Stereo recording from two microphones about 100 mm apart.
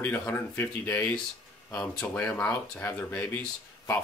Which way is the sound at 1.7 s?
10° left (ahead or behind).